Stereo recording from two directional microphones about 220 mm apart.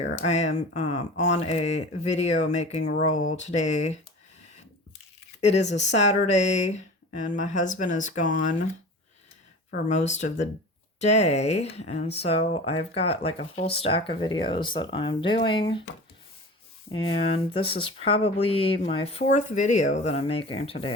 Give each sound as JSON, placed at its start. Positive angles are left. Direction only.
{"t": 0.2, "sound": "speech", "side_deg": 30}
{"t": 5.4, "sound": "speech", "side_deg": 30}
{"t": 9.9, "sound": "speech", "side_deg": 30}
{"t": 16.9, "sound": "speech", "side_deg": 25}